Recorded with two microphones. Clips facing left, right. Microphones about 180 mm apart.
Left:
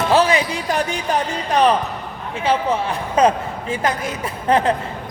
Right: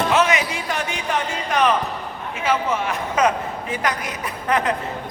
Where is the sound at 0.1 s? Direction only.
35° left (ahead or behind).